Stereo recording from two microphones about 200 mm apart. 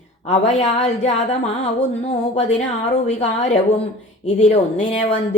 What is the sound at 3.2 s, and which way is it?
Speech, 35° left (ahead or behind).